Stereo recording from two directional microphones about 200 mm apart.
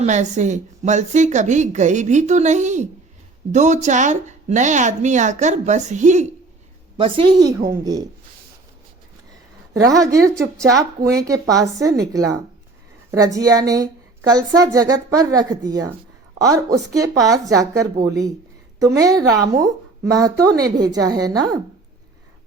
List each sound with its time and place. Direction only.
0.0 s a woman's voice: 35° right (ahead or behind)
6.9 s a woman's voice: 25° right (ahead or behind)
9.8 s a woman's voice: 15° right (ahead or behind)